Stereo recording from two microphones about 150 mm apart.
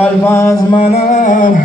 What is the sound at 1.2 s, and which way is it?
Music, 60° left (ahead or behind).